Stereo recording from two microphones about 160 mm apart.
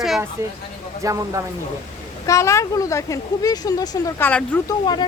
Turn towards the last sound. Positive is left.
turn(degrees=25)  # may be behind; listen again after turning